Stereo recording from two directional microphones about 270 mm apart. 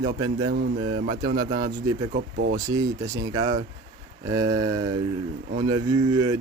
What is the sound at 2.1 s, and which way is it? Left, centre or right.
Speech, right.